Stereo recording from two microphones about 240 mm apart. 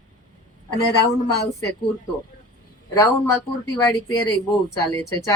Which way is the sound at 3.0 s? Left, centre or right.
Centre.